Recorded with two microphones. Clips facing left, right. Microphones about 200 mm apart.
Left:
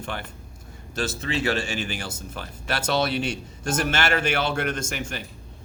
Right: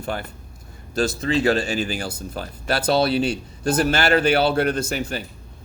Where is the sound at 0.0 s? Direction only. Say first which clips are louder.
Right 5 dB; 40° right (ahead or behind).